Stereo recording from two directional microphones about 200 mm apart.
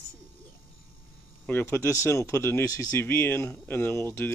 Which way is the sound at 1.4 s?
10° left (ahead or behind).